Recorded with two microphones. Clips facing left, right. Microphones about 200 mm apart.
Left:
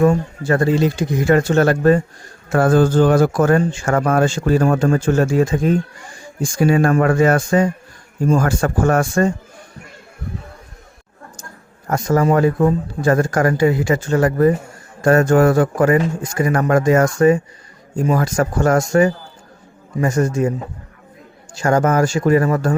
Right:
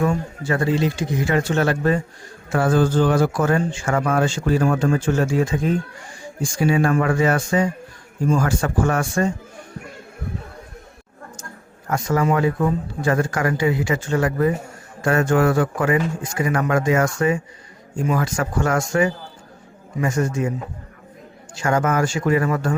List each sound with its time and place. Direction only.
0.0 s speech: 45° left (ahead or behind)
11.9 s speech: 40° left (ahead or behind)
21.5 s speech: 40° left (ahead or behind)